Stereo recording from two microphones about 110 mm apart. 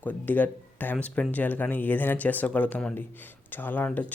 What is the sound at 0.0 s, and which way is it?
Speech, 15° left (ahead or behind).